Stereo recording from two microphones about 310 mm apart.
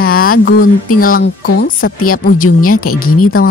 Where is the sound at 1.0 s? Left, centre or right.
Left.